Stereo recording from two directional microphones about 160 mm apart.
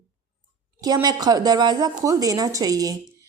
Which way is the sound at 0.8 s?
25° right (ahead or behind).